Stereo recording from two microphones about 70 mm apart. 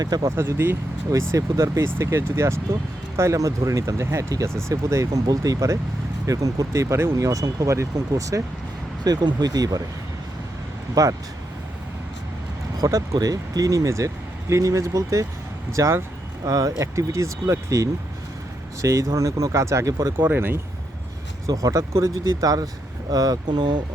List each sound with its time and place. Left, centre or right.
0.0 s speech: right
0.3 s speech: right
1.1 s speech: right
6.8 s speech: right
7.2 s speech: right
9.0 s speech: right
11.0 s speech: right
12.7 s speech: right
20.1 s speech: right
21.4 s speech: right